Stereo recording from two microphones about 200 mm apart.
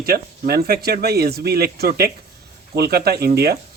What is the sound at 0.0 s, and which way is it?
Speech, 50° right (ahead or behind).